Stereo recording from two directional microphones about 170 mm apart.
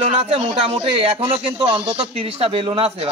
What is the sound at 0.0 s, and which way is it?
A man's voice, 40° right (ahead or behind).